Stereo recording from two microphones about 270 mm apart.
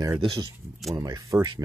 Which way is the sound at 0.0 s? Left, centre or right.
Centre.